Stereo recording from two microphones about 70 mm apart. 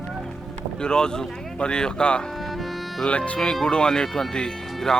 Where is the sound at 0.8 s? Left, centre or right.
Centre.